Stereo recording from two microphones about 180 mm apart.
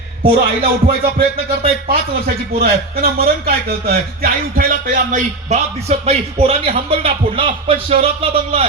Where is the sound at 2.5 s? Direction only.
55° right (ahead or behind); by 8.7 s 30° right (ahead or behind).